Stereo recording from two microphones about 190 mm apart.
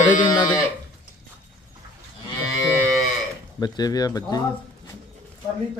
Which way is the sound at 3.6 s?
20° left (ahead or behind).